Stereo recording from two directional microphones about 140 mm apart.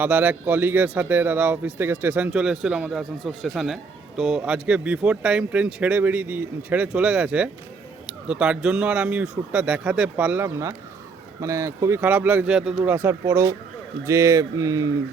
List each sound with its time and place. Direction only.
0.0 s a man's voice: 10° right (ahead or behind)